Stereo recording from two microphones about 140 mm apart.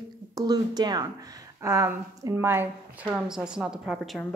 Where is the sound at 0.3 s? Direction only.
25° right (ahead or behind).